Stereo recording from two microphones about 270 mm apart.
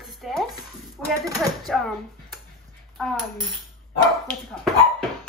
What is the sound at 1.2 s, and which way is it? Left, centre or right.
Speech, centre.